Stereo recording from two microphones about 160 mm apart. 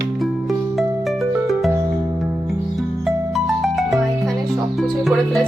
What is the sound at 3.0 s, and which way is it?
Music, centre (ahead or behind).